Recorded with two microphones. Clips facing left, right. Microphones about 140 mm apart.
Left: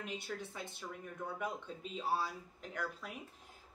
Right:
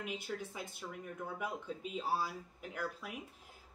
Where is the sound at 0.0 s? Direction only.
10° right (ahead or behind).